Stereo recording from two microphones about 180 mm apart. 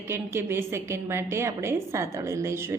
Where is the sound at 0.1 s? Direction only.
15° right (ahead or behind).